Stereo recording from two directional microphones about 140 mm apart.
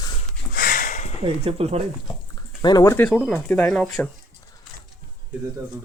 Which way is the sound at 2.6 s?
30° left (ahead or behind).